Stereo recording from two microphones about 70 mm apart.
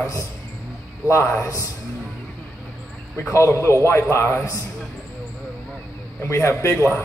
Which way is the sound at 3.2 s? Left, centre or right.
Left.